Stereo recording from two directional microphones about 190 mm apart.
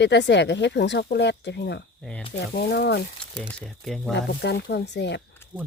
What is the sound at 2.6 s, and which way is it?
Speech, 60° left (ahead or behind).